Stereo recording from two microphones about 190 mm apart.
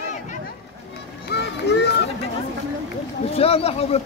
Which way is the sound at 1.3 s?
60° left (ahead or behind).